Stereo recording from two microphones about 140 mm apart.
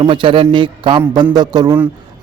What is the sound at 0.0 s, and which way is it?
Speech, 35° right (ahead or behind).